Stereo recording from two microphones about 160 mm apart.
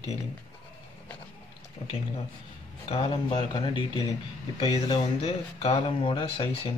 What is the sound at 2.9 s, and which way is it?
Speech, 35° left (ahead or behind).